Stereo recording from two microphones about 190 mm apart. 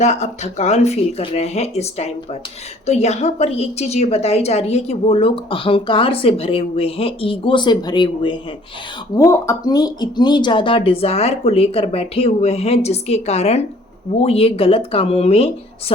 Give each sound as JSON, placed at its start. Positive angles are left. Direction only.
{"t": 0.0, "sound": "a woman's voice", "side_deg": 35}